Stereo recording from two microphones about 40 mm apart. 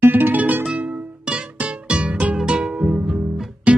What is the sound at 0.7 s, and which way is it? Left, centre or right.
Music, right.